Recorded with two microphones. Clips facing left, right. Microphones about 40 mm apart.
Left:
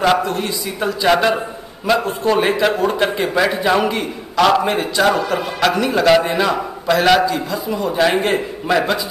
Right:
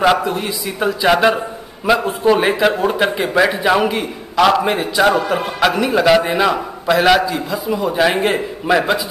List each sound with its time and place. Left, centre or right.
0.0 s a man's voice: centre